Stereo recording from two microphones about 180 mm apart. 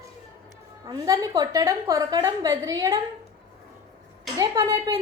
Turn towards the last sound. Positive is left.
turn(degrees=-15)  # may be behind; listen again after turning